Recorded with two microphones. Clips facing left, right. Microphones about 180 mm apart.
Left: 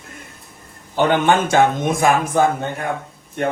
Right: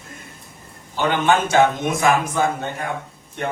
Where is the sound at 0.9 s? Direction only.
55° left (ahead or behind).